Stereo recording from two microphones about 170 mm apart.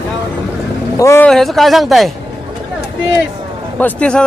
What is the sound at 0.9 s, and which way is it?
Speech, 15° left (ahead or behind).